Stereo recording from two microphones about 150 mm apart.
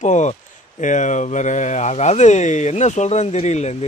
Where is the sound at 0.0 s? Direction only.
50° left (ahead or behind).